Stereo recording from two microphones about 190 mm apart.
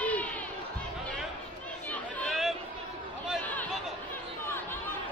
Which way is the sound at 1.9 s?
5° left (ahead or behind).